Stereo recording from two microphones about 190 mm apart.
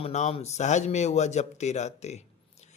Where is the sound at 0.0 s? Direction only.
35° left (ahead or behind).